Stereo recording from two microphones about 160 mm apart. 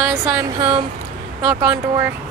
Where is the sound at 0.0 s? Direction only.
25° right (ahead or behind).